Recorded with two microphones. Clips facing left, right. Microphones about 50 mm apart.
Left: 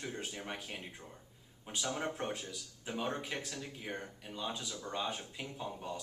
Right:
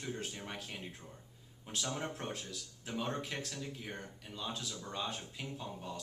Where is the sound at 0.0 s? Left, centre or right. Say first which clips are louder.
Even; centre.